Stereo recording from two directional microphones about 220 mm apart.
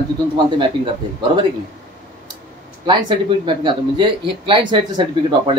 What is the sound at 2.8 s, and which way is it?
Speech, 20° right (ahead or behind).